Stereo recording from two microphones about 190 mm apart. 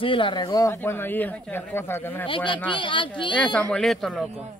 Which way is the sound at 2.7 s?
25° left (ahead or behind).